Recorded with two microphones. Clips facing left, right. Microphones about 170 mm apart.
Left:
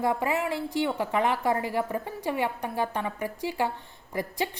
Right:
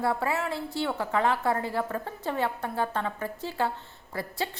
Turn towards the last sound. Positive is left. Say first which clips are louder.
# left 3 dB
turn(degrees=15)  # may be behind; listen again after turning